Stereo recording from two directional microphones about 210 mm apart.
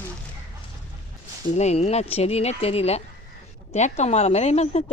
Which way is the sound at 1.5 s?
30° left (ahead or behind).